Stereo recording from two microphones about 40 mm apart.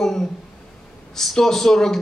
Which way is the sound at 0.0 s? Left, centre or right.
Centre.